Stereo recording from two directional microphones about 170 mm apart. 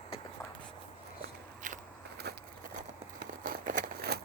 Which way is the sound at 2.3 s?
70° right (ahead or behind).